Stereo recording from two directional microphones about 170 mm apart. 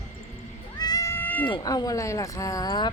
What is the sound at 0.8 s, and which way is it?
Cat, 20° left (ahead or behind).